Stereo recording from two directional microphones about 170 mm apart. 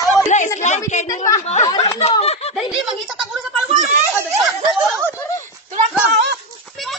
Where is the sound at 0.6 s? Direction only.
45° left (ahead or behind).